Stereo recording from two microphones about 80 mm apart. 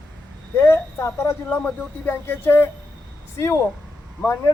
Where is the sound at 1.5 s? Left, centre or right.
Left.